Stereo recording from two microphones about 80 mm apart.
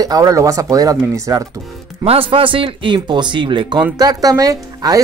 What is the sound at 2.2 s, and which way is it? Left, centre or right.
Speech, right.